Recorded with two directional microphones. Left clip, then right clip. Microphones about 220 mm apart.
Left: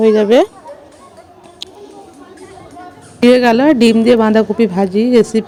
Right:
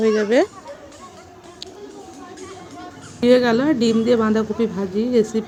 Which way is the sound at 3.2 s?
35° left (ahead or behind).